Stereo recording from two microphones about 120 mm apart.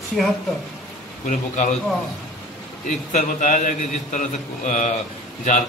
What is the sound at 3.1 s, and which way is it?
A man's voice, 90° left.